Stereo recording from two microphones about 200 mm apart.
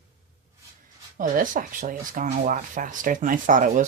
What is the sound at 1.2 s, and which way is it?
Speech, 45° right (ahead or behind).